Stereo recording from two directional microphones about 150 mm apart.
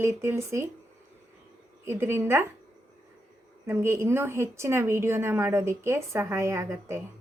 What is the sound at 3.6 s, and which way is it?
Speech, 15° right (ahead or behind).